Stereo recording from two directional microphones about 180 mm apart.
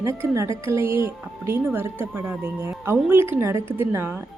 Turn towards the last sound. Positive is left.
turn(degrees=-15)  # may be behind; listen again after turning